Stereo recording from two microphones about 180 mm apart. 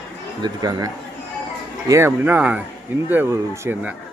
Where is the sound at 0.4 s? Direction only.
20° right (ahead or behind).